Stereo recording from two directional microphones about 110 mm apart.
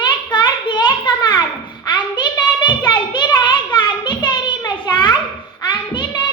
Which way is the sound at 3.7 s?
45° left (ahead or behind).